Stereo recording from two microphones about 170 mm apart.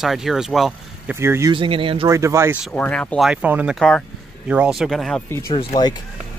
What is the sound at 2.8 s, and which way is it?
Speech, 10° left (ahead or behind).